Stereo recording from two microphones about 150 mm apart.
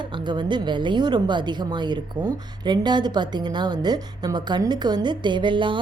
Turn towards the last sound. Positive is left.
turn(degrees=-35)  # may be behind; listen again after turning